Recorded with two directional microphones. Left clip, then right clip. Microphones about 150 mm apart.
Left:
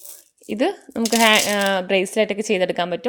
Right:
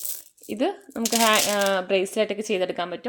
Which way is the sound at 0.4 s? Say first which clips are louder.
Left 4 dB; 40° left (ahead or behind).